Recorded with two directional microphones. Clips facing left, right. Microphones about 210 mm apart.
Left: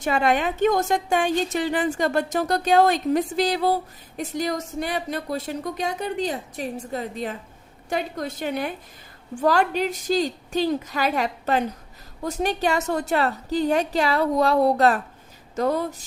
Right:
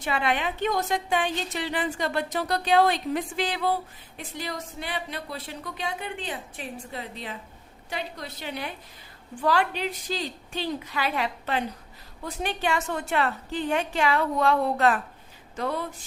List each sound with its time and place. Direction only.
0.0 s a woman's voice: 45° left (ahead or behind)